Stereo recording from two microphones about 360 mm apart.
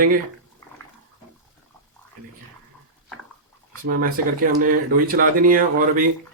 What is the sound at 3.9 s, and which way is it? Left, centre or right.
Speech, right.